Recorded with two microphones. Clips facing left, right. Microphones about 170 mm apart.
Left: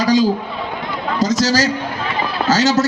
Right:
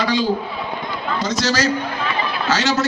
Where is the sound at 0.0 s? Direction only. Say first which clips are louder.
Left 6 dB; 40° left (ahead or behind).